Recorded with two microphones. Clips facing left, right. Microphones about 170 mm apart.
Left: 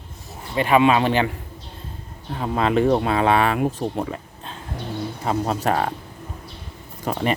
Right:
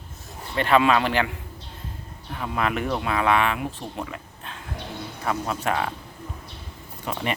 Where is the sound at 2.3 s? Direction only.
30° left (ahead or behind).